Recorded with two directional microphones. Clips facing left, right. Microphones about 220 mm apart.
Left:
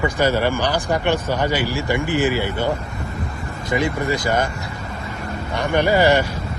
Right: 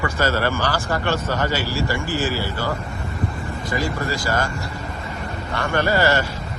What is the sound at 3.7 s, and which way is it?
Speech, 20° left (ahead or behind).